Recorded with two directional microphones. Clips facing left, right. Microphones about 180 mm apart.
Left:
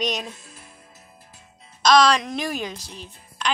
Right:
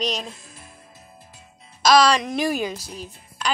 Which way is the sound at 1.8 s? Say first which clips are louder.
Right 1 dB; centre (ahead or behind).